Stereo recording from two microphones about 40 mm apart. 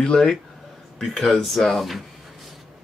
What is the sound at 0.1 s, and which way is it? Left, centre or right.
Speech, centre.